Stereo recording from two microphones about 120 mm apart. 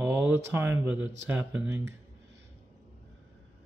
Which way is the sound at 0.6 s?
20° right (ahead or behind).